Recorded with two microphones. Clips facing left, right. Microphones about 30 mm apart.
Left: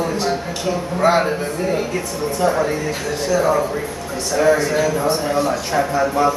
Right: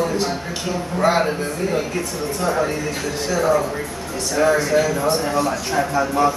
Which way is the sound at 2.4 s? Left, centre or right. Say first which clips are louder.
Left 3 dB; centre.